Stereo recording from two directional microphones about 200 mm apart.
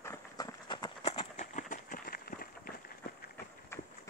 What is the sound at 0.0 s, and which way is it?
Horse, 15° left (ahead or behind).